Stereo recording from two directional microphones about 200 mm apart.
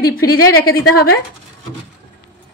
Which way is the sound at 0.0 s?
50° left (ahead or behind).